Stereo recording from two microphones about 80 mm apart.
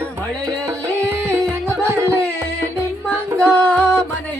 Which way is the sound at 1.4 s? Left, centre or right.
Right.